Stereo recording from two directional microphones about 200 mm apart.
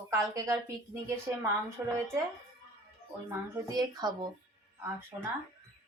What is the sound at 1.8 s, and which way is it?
Speech, 10° right (ahead or behind).